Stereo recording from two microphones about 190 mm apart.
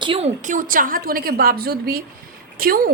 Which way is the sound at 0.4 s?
45° right (ahead or behind).